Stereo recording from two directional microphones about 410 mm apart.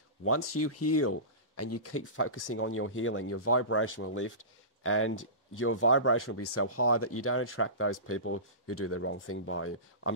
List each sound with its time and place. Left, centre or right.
0.6 s speech: left
5.1 s speech: left
5.6 s speech: left